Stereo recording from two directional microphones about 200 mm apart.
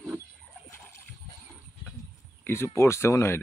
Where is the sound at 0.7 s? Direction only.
15° left (ahead or behind).